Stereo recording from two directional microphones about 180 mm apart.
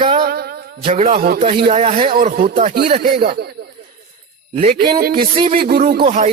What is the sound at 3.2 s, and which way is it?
Speech, 60° right (ahead or behind).